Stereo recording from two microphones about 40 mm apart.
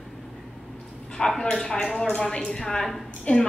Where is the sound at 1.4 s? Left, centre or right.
Centre.